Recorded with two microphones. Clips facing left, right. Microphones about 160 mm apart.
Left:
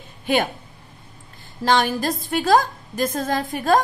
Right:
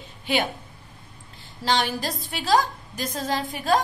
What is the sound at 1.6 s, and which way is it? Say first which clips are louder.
A woman's voice: left 5 dB; 50° left (ahead or behind).